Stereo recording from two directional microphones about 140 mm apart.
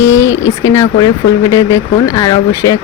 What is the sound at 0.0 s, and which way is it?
Speech, 20° left (ahead or behind).